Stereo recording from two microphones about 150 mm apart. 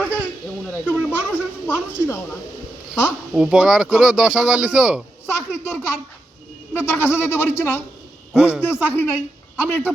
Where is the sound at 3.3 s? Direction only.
5° right (ahead or behind).